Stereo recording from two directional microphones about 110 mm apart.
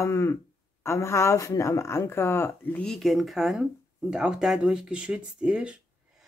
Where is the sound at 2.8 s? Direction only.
5° left (ahead or behind).